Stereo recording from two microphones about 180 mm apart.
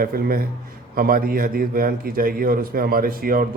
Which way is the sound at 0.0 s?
55° right (ahead or behind).